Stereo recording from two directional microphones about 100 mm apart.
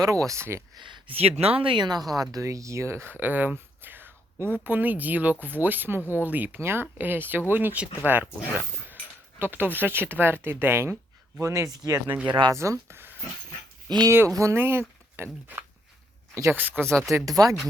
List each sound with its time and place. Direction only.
0.0 s speech: 35° right (ahead or behind)
0.8 s speech: 50° right (ahead or behind)
1.1 s speech: 85° right; by 2.0 s 50° right (ahead or behind)
2.3 s speech: 30° right (ahead or behind)
6.0 s speech: 20° left (ahead or behind)
6.2 s speech: 15° right (ahead or behind)
11.3 s speech: 35° right (ahead or behind)
12.3 s speech: 50° right (ahead or behind)
12.5 s speech: 30° right (ahead or behind)
13.8 s speech: 45° right (ahead or behind)
14.1 s speech: 30° right (ahead or behind)
16.6 s speech: 20° right (ahead or behind)
17.1 s speech: 35° right (ahead or behind)